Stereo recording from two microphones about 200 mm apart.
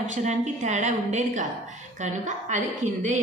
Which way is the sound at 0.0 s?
35° right (ahead or behind).